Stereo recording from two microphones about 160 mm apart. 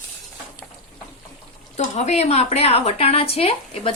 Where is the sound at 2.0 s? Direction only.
40° left (ahead or behind).